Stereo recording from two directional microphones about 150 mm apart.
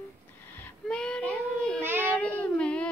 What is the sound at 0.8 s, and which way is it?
Child singing, 5° left (ahead or behind).